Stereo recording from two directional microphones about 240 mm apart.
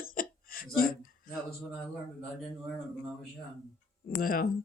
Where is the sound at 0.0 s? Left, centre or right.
Left.